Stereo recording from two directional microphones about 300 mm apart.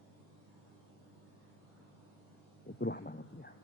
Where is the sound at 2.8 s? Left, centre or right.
Left.